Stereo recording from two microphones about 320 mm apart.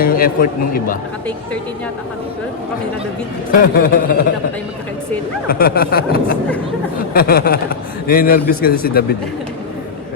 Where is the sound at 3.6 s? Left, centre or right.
Left.